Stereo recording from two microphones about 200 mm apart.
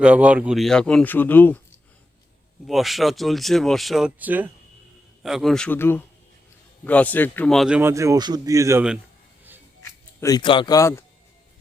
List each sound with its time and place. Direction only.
0.0 s speech: 5° right (ahead or behind); by 1.6 s 10° left (ahead or behind)
2.6 s speech: centre (ahead or behind)
7.8 s speech: 15° right (ahead or behind)
10.2 s speech: 20° left (ahead or behind)